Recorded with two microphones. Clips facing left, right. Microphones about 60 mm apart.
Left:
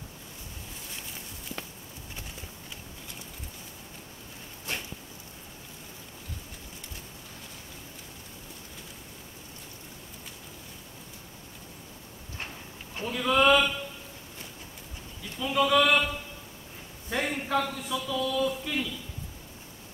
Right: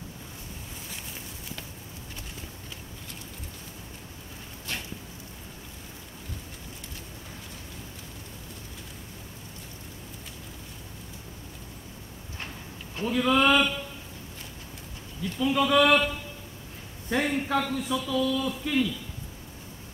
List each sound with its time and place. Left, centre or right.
4.7 s a sound: left
13.0 s a man's voice: centre
15.3 s a man's voice: centre
17.1 s a man's voice: centre